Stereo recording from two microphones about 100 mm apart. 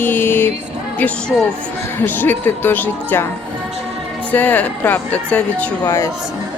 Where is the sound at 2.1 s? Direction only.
20° left (ahead or behind).